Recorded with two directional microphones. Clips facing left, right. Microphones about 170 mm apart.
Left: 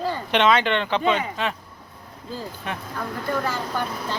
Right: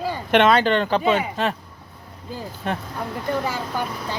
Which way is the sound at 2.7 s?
40° right (ahead or behind).